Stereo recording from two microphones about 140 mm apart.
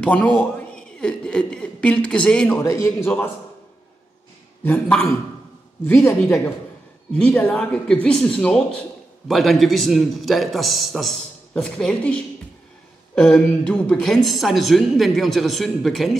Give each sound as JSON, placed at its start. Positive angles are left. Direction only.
{"t": 0.0, "sound": "a man's voice", "side_deg": 10}
{"t": 2.6, "sound": "a man's voice", "side_deg": 20}
{"t": 4.6, "sound": "speech", "side_deg": 10}
{"t": 6.0, "sound": "a man's voice", "side_deg": 20}
{"t": 7.2, "sound": "a woman's voice", "side_deg": 5}